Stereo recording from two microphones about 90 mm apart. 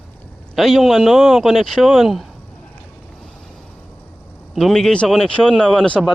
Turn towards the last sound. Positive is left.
turn(degrees=5)  # may be behind; listen again after turning